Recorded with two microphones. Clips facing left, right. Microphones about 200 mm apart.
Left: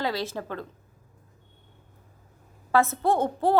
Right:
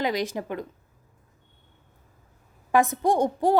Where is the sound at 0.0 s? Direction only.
15° right (ahead or behind).